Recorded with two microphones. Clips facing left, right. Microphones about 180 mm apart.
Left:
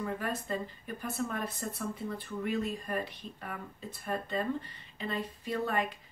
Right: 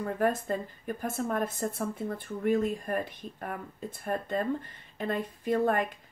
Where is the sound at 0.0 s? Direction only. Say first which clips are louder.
Right 7 dB; 50° right (ahead or behind).